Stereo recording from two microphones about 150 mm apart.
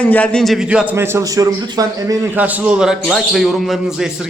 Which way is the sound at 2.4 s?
10° right (ahead or behind).